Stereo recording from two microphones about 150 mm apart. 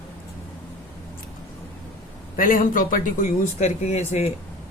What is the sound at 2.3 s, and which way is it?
Speech, 65° left (ahead or behind).